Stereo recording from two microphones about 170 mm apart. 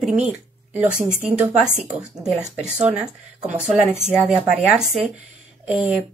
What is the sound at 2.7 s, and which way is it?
A woman's voice, 5° right (ahead or behind).